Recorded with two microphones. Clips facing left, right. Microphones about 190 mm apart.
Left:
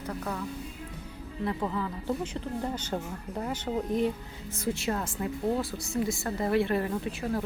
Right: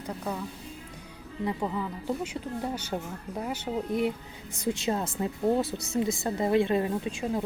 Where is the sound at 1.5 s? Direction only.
15° right (ahead or behind).